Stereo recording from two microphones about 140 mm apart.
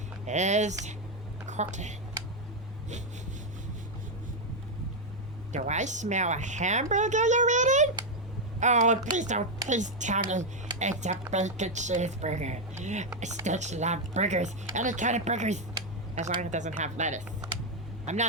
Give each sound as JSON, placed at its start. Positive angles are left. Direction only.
{"t": 0.3, "sound": "a woman's voice", "side_deg": -55}
{"t": 5.5, "sound": "a woman's voice", "side_deg": -55}